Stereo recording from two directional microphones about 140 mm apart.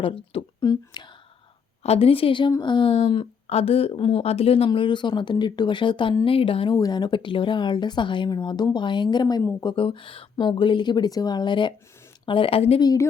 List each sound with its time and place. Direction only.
0.6 s speech: 30° left (ahead or behind)
1.8 s a woman's voice: 45° left (ahead or behind)
6.7 s speech: 30° left (ahead or behind); by 12.8 s 45° left (ahead or behind)
12.8 s speech: 25° left (ahead or behind)